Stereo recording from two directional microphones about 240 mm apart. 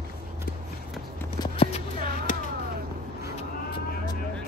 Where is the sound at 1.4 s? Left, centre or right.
Left.